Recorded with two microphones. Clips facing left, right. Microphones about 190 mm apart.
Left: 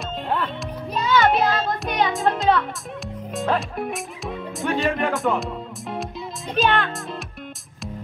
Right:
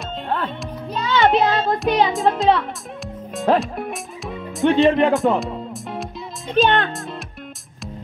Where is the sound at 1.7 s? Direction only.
30° right (ahead or behind).